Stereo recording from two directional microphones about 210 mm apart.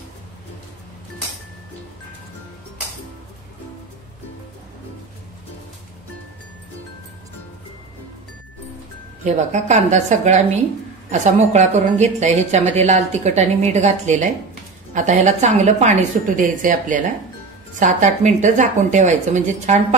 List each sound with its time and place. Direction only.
9.2 s a woman's voice: 35° right (ahead or behind)